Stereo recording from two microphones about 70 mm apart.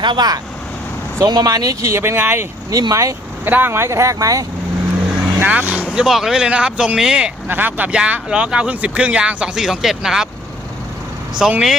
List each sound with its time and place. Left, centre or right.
0.0 s speech: right
1.2 s speech: right
1.8 s speech: right
2.6 s speech: right
3.4 s speech: right
5.4 s speech: right
6.1 s speech: centre
7.4 s speech: right
7.9 s speech: centre
11.4 s speech: centre